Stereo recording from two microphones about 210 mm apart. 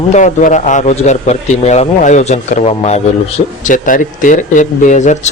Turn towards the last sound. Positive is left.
turn(degrees=35)  # may be behind; listen again after turning